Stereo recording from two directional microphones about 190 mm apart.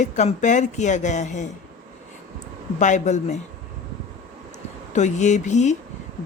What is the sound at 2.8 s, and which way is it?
Speech, 40° left (ahead or behind).